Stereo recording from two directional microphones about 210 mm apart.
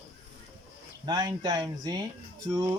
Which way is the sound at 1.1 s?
20° right (ahead or behind).